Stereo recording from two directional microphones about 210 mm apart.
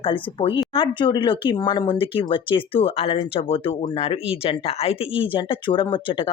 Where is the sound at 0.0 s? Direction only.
25° left (ahead or behind).